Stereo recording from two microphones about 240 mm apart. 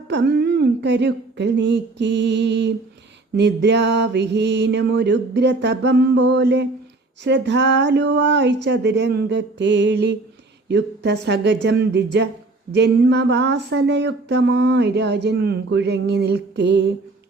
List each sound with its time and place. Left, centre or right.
0.1 s speech: right